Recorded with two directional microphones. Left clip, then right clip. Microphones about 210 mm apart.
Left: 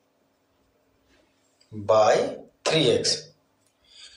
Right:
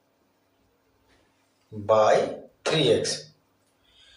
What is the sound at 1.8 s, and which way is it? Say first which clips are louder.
Speech: left 1 dB; 25° left (ahead or behind).